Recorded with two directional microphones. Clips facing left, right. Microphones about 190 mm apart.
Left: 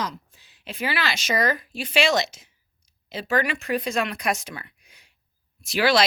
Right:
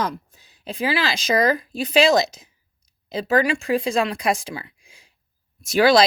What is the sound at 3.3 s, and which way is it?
Speech, 35° right (ahead or behind).